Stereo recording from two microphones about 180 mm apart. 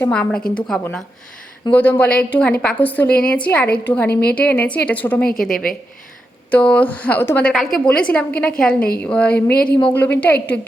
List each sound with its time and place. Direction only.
0.0 s a woman's voice: 5° left (ahead or behind)
4.1 s a woman's voice: 60° left (ahead or behind)
4.4 s a woman's voice: 5° left (ahead or behind)